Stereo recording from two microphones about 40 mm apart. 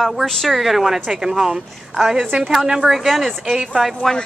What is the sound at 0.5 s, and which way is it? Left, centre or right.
A woman's voice, centre.